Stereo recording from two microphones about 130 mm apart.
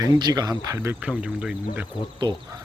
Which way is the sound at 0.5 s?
20° right (ahead or behind).